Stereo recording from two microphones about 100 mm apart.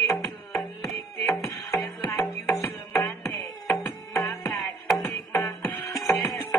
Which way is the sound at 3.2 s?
Centre (ahead or behind).